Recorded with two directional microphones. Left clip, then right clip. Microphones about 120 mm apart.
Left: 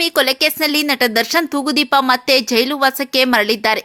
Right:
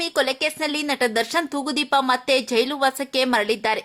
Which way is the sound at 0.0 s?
20° left (ahead or behind).